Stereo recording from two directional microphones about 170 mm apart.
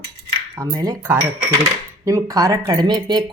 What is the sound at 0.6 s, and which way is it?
Cutlery, 20° right (ahead or behind).